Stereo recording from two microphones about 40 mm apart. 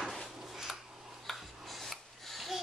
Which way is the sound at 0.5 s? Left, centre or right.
Centre.